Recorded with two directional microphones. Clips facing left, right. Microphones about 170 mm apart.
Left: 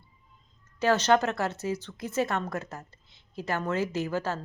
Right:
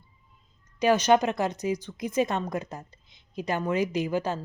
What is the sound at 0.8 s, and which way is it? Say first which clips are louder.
Speech: right 2 dB; 15° right (ahead or behind).